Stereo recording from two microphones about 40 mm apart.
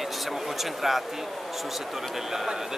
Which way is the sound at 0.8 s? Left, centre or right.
Centre.